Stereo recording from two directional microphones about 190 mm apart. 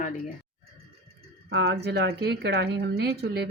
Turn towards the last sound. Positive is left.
turn(degrees=-60)  # may be behind; listen again after turning